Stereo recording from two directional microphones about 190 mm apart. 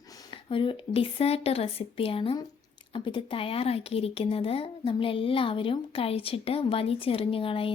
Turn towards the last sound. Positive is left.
turn(degrees=30)  # may be behind; listen again after turning